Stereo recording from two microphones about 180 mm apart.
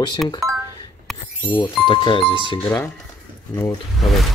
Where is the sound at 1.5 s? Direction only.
30° left (ahead or behind).